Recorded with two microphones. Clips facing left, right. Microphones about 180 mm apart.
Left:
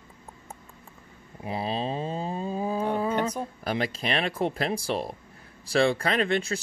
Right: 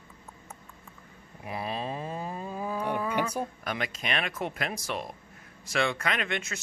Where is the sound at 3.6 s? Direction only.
30° left (ahead or behind).